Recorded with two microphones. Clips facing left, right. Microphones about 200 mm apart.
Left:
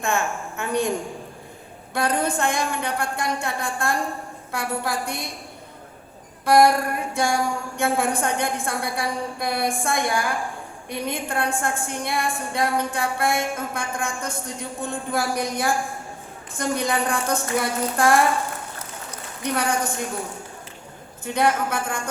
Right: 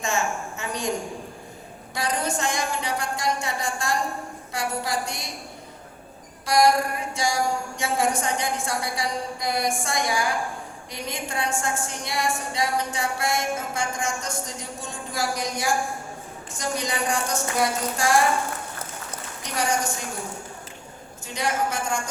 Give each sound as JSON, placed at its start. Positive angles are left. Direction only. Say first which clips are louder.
{"t": 0.0, "sound": "a sound", "louder": "left 2 dB", "side_deg": 55}
{"t": 1.9, "sound": "a woman's voice", "louder": "left 4 dB", "side_deg": 60}
{"t": 6.4, "sound": "a woman's voice", "louder": "left 3 dB", "side_deg": 55}
{"t": 19.4, "sound": "a woman's voice", "louder": "left 2 dB", "side_deg": 55}
{"t": 21.2, "sound": "a woman's voice", "louder": "left 4 dB", "side_deg": 55}